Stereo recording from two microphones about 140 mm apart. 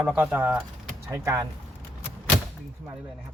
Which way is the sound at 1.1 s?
20° right (ahead or behind).